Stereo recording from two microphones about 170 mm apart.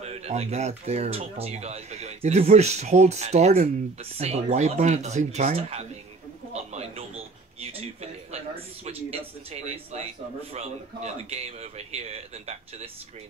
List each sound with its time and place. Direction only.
0.0 s speech: 40° right (ahead or behind)
6.5 s a sound: 40° right (ahead or behind)
10.5 s speech: 40° right (ahead or behind)